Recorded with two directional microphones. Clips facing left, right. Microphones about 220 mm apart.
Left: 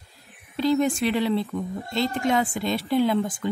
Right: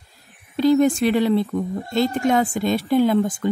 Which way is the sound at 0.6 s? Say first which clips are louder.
Right 6 dB; 45° right (ahead or behind).